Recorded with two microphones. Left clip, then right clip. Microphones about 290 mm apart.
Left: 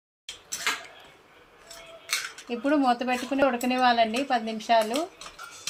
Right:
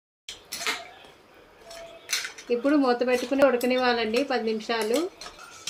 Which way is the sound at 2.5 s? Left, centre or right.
Left.